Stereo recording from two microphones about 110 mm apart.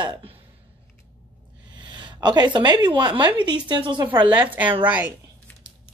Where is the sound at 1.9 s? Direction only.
45° right (ahead or behind).